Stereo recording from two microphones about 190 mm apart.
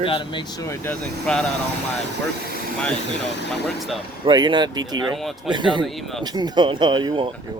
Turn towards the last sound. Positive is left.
turn(degrees=-25)  # may be behind; listen again after turning